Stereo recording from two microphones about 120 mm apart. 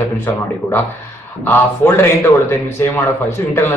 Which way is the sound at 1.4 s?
15° left (ahead or behind).